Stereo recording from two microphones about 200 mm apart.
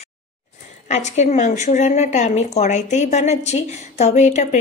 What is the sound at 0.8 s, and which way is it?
Speech, 35° left (ahead or behind).